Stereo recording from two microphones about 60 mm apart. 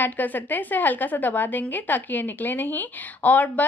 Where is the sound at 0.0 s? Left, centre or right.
Left.